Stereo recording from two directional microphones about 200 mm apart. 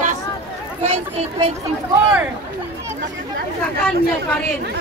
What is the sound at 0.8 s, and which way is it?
Speech, 30° right (ahead or behind).